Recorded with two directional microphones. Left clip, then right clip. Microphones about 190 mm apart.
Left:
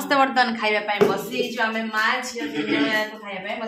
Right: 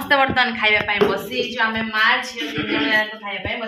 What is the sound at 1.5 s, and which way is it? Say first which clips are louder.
Speech: right 5 dB; 35° left (ahead or behind).